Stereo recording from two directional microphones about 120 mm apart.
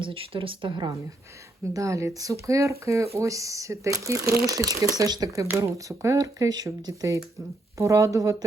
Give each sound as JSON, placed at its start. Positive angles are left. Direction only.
{"t": 0.0, "sound": "speech", "side_deg": -45}
{"t": 1.7, "sound": "speech", "side_deg": -25}